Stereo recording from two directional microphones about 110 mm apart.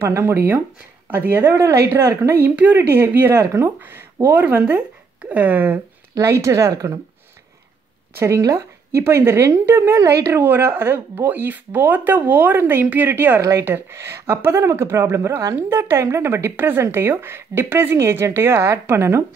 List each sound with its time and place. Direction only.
0.0 s speech: 25° right (ahead or behind)
6.1 s speech: 25° right (ahead or behind)
8.2 s speech: 30° right (ahead or behind)